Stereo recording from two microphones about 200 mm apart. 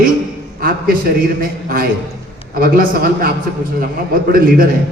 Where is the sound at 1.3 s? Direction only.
45° right (ahead or behind).